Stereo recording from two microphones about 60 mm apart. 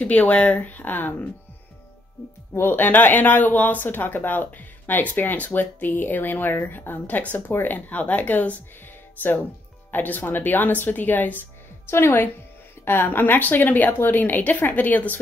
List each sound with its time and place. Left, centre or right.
0.0 s speech: left
2.5 s speech: left
9.8 s speech: left